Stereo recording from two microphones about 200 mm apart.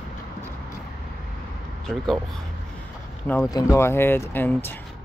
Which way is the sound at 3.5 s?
15° left (ahead or behind).